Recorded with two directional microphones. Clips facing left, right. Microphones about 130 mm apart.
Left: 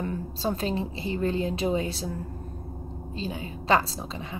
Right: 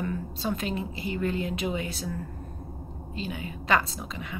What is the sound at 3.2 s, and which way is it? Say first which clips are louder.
Speech: left 1 dB; 30° left (ahead or behind).